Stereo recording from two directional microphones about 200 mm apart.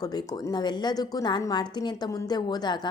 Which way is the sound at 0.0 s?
20° left (ahead or behind).